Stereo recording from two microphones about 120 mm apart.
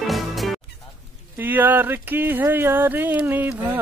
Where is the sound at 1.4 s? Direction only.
15° right (ahead or behind).